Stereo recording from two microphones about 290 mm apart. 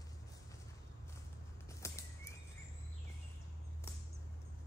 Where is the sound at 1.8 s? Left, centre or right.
Centre.